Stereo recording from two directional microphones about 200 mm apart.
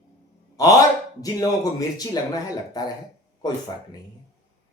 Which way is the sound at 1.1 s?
15° left (ahead or behind).